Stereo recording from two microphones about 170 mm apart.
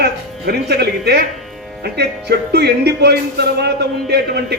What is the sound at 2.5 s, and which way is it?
A man's voice, 75° right (ahead or behind).